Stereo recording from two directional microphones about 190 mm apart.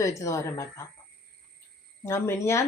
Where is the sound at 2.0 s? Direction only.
15° left (ahead or behind).